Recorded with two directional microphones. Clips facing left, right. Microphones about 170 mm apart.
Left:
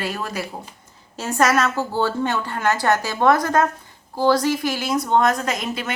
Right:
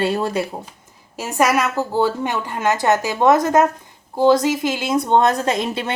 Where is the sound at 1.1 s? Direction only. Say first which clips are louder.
Right 1 dB; 15° right (ahead or behind).